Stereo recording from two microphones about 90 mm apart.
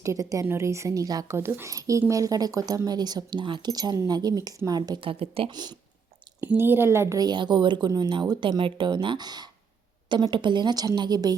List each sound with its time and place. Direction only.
0.0 s speech: 40° right (ahead or behind)
1.4 s speech: 25° right (ahead or behind); by 3.7 s 60° right (ahead or behind)
3.7 s a woman's voice: 45° right (ahead or behind)
4.9 s speech: 85° right
5.5 s a woman's voice: 50° right (ahead or behind)
6.4 s a woman's voice: 25° right (ahead or behind)
7.2 s speech: 55° right (ahead or behind)
7.9 s a woman's voice: 50° right (ahead or behind)